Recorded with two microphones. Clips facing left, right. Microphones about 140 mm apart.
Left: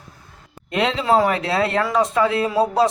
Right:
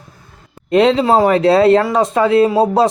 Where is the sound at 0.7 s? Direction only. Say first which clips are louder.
Right 7 dB; 30° right (ahead or behind).